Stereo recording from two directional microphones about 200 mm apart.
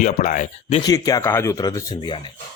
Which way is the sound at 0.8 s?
20° left (ahead or behind).